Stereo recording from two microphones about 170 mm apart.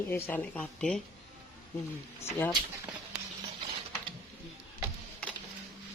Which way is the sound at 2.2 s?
15° left (ahead or behind).